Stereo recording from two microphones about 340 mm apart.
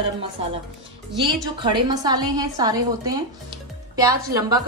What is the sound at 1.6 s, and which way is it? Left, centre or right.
A woman's voice, centre.